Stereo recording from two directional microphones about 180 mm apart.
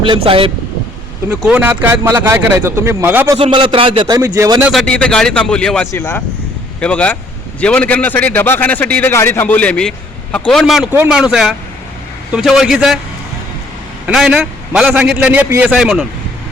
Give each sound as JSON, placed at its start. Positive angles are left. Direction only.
{"t": 0.0, "sound": "speech", "side_deg": -30}
{"t": 1.3, "sound": "speech", "side_deg": -10}
{"t": 3.3, "sound": "speech", "side_deg": -30}
{"t": 4.2, "sound": "speech", "side_deg": -20}
{"t": 4.6, "sound": "a man's voice", "side_deg": 0}
{"t": 14.1, "sound": "a man's voice", "side_deg": -5}